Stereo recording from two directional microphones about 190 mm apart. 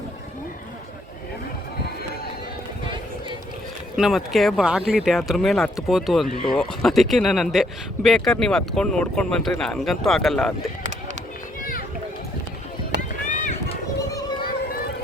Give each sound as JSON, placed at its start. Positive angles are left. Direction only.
{"t": 3.9, "sound": "speech", "side_deg": 0}
{"t": 13.0, "sound": "run", "side_deg": 40}